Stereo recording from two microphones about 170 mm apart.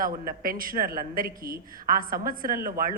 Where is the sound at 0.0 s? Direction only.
55° right (ahead or behind).